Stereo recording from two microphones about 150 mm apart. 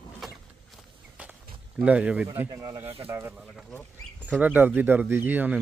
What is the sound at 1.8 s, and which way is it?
Speech, 10° right (ahead or behind).